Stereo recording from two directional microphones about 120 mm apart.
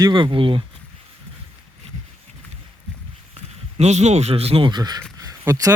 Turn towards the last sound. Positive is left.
turn(degrees=-30)  # may be behind; listen again after turning